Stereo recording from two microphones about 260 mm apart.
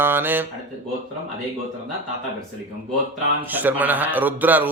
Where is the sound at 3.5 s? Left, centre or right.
Centre.